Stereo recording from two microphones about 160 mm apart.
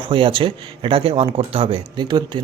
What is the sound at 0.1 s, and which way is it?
Speech, 35° right (ahead or behind).